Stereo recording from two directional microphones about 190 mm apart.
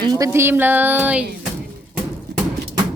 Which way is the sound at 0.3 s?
10° right (ahead or behind).